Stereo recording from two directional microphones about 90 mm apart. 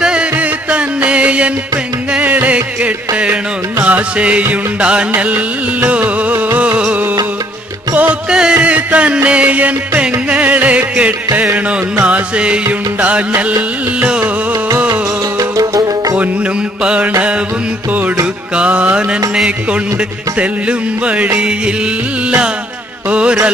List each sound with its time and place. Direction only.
0.0 s music: 10° right (ahead or behind)
15.5 s music: 40° right (ahead or behind)
16.8 s music: 10° right (ahead or behind)
18.6 s music: 15° right (ahead or behind)